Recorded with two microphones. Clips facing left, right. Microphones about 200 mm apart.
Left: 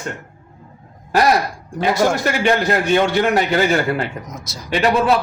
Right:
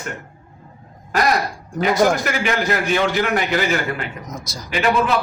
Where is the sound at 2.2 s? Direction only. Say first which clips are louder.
Left 4 dB; 30° left (ahead or behind).